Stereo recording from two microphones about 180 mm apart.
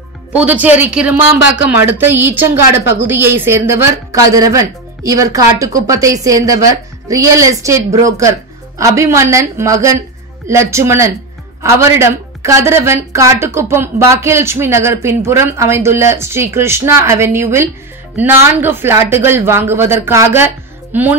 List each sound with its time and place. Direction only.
0.3 s speech: 10° right (ahead or behind)